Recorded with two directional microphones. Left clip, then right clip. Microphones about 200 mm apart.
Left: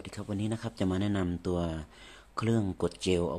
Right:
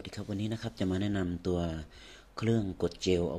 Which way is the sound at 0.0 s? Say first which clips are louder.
Left 1 dB; 5° left (ahead or behind).